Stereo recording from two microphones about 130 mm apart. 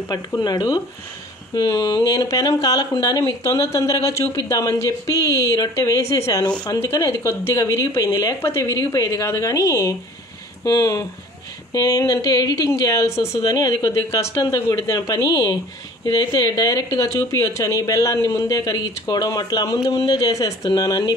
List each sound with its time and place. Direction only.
0.1 s speech: 30° left (ahead or behind)